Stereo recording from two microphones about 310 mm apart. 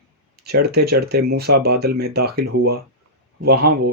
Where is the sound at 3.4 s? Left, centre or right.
Right.